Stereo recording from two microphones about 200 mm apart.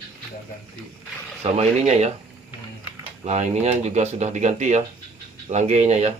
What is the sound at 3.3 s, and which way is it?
Speech, 35° right (ahead or behind).